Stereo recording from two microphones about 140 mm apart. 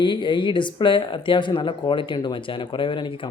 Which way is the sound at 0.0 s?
35° left (ahead or behind).